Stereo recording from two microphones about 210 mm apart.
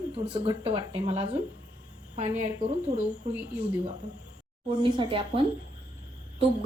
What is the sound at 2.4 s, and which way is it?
Speech, 35° right (ahead or behind).